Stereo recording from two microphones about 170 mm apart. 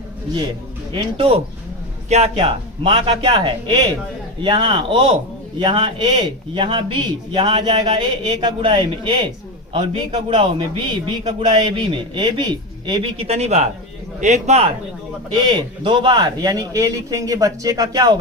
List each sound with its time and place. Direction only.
0.9 s a man's voice: 30° right (ahead or behind)
13.2 s a man's voice: 40° right (ahead or behind)
15.4 s a man's voice: 25° right (ahead or behind)